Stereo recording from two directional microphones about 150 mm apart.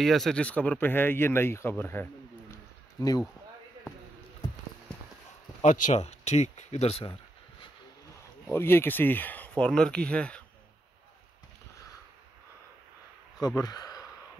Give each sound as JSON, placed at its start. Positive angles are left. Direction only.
{"t": 0.0, "sound": "speech", "side_deg": 0}
{"t": 2.5, "sound": "a sound", "side_deg": 25}
{"t": 5.6, "sound": "speech", "side_deg": 55}
{"t": 8.5, "sound": "speech", "side_deg": 15}
{"t": 13.6, "sound": "speech", "side_deg": 25}